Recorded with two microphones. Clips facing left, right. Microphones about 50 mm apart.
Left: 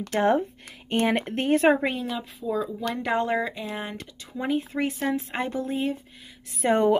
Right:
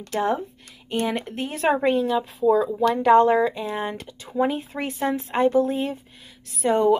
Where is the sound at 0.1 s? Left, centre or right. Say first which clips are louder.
Left 2 dB; left.